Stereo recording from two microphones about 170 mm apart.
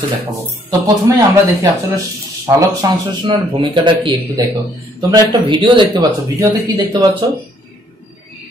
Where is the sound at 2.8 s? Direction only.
25° right (ahead or behind).